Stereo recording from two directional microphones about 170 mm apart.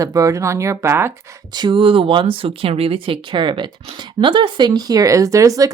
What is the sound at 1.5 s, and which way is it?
Speech, 30° right (ahead or behind).